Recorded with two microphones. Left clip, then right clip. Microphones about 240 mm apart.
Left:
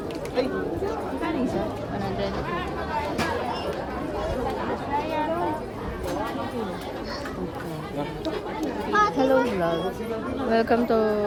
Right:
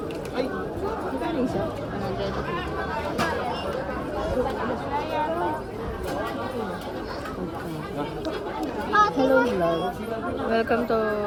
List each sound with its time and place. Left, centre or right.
8.9 s chatter: left
9.3 s chatter: left
10.5 s speech: left